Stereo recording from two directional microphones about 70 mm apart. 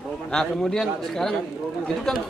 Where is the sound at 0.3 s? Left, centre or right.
Centre.